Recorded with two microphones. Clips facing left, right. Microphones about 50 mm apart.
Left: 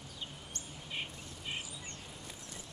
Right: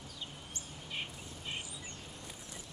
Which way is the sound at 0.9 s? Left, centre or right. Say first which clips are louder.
Even; centre.